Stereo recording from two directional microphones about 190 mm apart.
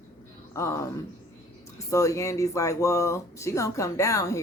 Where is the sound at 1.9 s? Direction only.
15° left (ahead or behind).